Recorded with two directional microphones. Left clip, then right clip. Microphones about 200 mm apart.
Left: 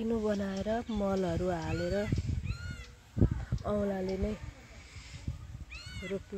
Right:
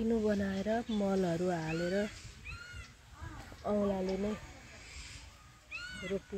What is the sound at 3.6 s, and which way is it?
Speech, 15° left (ahead or behind).